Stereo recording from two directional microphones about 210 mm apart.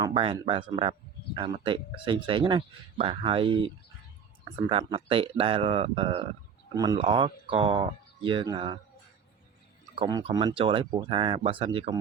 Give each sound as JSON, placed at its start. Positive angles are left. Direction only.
{"t": 0.0, "sound": "speech", "side_deg": -25}
{"t": 9.9, "sound": "speech", "side_deg": -20}